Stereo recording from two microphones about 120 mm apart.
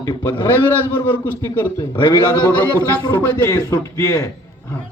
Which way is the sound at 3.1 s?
15° left (ahead or behind).